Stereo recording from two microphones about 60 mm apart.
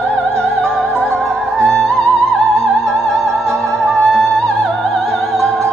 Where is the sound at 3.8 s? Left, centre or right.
Centre.